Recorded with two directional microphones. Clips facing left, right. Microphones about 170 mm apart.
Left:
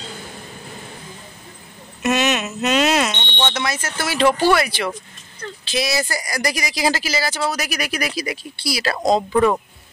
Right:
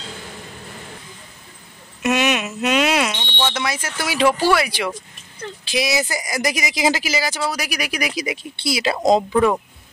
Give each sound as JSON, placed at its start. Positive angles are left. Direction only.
{"t": 2.0, "sound": "speech", "side_deg": -10}
{"t": 9.3, "sound": "speech", "side_deg": 0}